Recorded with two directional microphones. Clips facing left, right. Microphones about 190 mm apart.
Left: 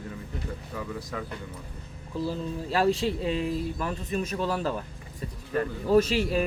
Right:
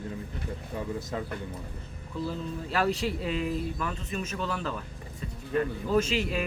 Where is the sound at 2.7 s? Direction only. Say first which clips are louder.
Left 4 dB; 25° left (ahead or behind).